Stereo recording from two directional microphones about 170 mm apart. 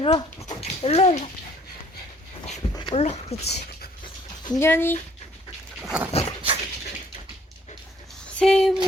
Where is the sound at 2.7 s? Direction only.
30° left (ahead or behind).